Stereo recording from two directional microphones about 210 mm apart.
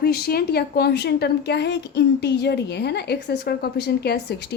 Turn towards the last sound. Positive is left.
turn(degrees=50)  # may be behind; listen again after turning